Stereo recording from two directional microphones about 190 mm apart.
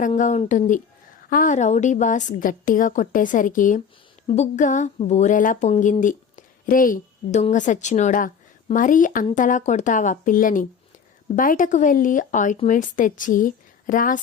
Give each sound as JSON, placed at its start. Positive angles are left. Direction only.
{"t": 0.2, "sound": "a woman's voice", "side_deg": 40}